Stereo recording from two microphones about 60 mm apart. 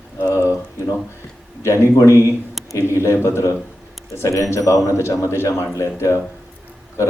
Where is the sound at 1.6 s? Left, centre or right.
Left.